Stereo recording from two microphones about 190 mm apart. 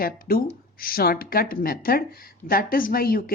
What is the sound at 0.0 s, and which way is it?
Speech, 50° left (ahead or behind).